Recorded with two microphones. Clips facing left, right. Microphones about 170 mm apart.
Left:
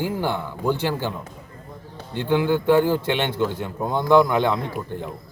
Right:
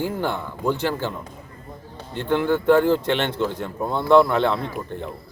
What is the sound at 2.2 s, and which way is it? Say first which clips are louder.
A man's voice: left 1 dB; 10° left (ahead or behind).